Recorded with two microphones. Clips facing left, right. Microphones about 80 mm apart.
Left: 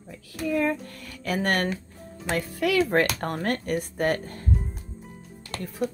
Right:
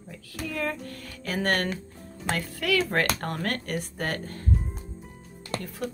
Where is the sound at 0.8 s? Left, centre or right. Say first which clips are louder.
Right 2 dB; right.